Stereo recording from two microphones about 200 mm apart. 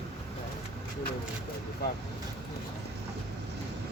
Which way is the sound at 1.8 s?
55° left (ahead or behind).